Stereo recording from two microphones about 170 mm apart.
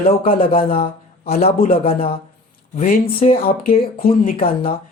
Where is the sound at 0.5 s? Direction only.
35° left (ahead or behind).